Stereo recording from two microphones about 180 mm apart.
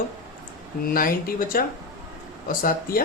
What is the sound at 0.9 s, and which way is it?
A man's voice, 50° left (ahead or behind).